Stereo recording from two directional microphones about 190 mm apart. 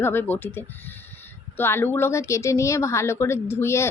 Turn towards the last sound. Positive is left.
turn(degrees=15)  # may be behind; listen again after turning